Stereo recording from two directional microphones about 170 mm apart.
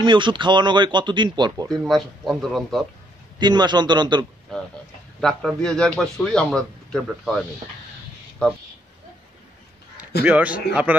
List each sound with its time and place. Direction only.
0.0 s speech: 30° right (ahead or behind)
1.7 s a man's voice: centre (ahead or behind)
3.3 s speech: 25° right (ahead or behind)
5.2 s a man's voice: centre (ahead or behind)
10.2 s a man's voice: 10° right (ahead or behind)